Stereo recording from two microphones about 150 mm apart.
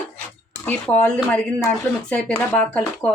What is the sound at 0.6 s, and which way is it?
Speech, 10° left (ahead or behind).